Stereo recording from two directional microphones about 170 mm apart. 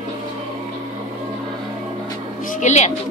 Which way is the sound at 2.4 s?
50° left (ahead or behind).